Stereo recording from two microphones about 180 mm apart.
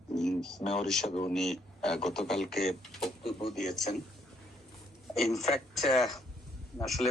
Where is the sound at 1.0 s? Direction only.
35° left (ahead or behind).